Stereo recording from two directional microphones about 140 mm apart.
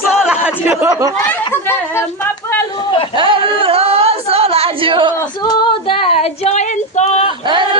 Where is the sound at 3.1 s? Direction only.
40° right (ahead or behind).